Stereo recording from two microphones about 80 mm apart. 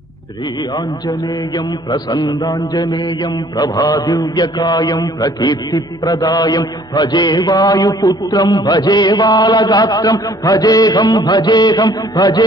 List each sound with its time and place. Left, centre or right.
1.0 s mantra: left